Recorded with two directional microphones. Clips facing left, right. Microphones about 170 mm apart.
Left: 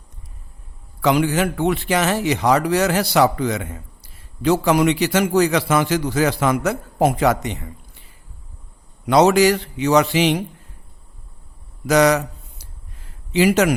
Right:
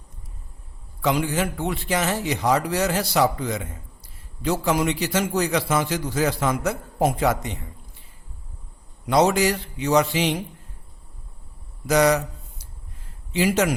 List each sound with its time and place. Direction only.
1.0 s a man's voice: 80° left
9.0 s a man's voice: 75° left (ahead or behind)
11.9 s a man's voice: 80° left
13.3 s a man's voice: 80° left